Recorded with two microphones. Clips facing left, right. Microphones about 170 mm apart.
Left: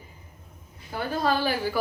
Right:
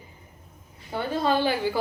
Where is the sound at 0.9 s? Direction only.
25° right (ahead or behind).